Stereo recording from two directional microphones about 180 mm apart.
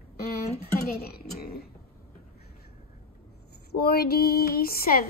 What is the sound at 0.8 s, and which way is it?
Speech, 60° left (ahead or behind).